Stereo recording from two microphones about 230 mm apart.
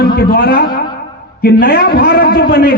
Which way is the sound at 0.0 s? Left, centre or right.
Left.